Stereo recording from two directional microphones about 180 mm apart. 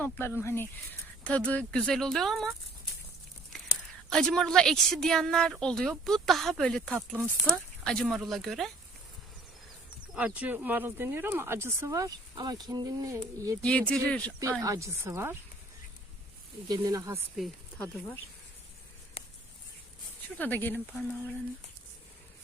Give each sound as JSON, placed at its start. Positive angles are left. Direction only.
{"t": 0.0, "sound": "a woman's voice", "side_deg": 10}
{"t": 4.1, "sound": "a woman's voice", "side_deg": 5}
{"t": 10.2, "sound": "speech", "side_deg": -10}
{"t": 13.6, "sound": "speech", "side_deg": 5}
{"t": 14.6, "sound": "speech", "side_deg": -15}
{"t": 16.6, "sound": "speech", "side_deg": -20}
{"t": 17.3, "sound": "speech", "side_deg": 5}
{"t": 19.2, "sound": "a sound", "side_deg": 35}
{"t": 20.4, "sound": "speech", "side_deg": 10}